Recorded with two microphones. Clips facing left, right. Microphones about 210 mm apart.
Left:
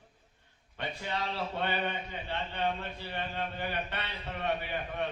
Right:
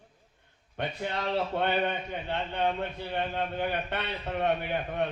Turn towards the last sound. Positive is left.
turn(degrees=-55)  # may be behind; listen again after turning